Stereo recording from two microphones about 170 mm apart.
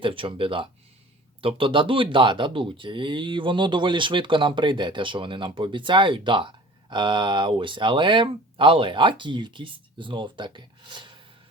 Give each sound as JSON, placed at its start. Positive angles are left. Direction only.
{"t": 0.0, "sound": "speech", "side_deg": -30}